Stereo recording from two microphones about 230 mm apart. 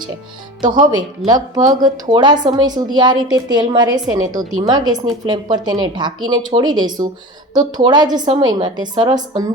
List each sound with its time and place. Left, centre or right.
0.6 s a woman's voice: centre